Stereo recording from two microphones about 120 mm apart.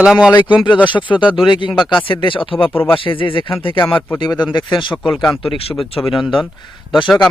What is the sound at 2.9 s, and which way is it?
Speech, 45° left (ahead or behind).